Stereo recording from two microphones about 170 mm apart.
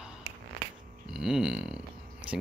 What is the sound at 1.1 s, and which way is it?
Speech, 5° right (ahead or behind).